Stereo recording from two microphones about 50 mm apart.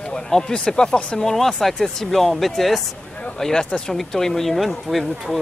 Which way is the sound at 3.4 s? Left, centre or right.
Centre.